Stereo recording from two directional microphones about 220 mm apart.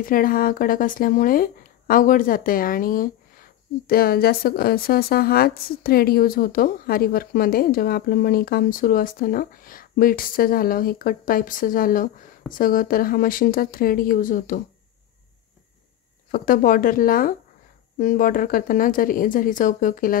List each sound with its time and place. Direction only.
0.0 s speech: 40° left (ahead or behind)
16.3 s speech: 40° left (ahead or behind)